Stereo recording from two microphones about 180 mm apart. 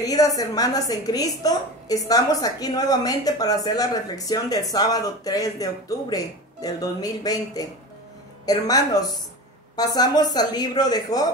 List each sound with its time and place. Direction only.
0.0 s a woman's voice: 20° left (ahead or behind)